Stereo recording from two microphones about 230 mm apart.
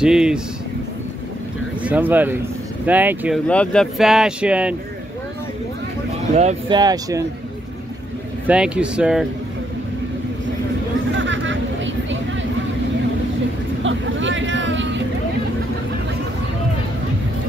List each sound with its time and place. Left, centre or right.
0.0 s speech: centre
1.8 s speech: centre
3.4 s speech: centre
6.3 s speech: right
6.8 s speech: centre
8.5 s speech: centre
11.1 s a sound: right
13.8 s vehicle: right